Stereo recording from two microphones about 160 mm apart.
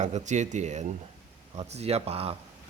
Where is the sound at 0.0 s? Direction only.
45° right (ahead or behind).